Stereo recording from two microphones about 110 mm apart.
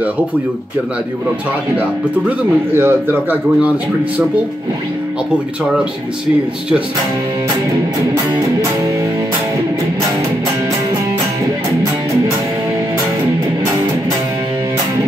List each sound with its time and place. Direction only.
2.2 s speech: 20° right (ahead or behind)